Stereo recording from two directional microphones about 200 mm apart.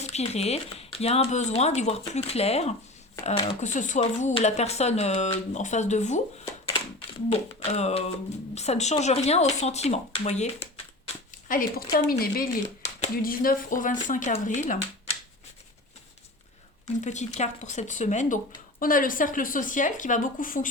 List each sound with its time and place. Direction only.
0.0 s speech: 35° left (ahead or behind)
7.3 s speech: 30° left (ahead or behind)
17.0 s speech: 35° left (ahead or behind)